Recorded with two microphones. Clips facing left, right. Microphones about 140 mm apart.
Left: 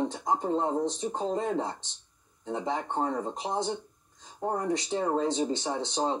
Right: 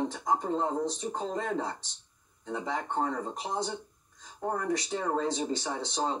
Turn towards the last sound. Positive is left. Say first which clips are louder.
# left 3 dB
turn(degrees=25)  # may be behind; listen again after turning